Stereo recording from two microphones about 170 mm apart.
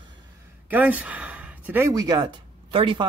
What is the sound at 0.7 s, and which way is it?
A man's voice, 10° right (ahead or behind).